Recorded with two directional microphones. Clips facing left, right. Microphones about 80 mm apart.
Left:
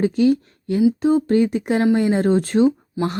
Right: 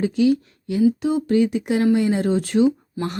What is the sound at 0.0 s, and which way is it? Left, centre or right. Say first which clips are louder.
Speech: left 2 dB; left.